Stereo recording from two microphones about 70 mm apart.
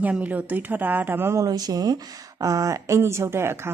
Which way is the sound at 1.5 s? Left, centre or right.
Right.